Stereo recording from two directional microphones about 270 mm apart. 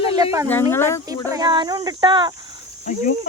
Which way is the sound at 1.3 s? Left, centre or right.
Centre.